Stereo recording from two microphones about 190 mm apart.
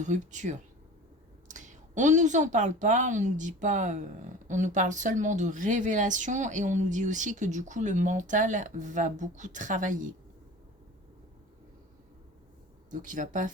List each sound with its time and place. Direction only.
0.0 s a woman's voice: 40° right (ahead or behind)
12.9 s speech: 45° right (ahead or behind)